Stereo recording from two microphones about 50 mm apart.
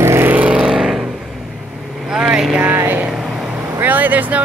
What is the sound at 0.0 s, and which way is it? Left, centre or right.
Vehicle, right.